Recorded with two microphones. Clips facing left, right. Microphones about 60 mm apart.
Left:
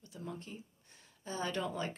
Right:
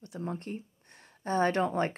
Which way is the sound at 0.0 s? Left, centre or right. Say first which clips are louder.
Right 8 dB; right.